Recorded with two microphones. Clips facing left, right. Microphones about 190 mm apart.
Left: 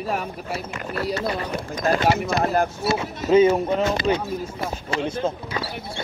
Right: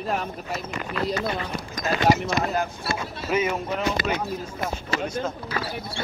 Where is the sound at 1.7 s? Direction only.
55° left (ahead or behind).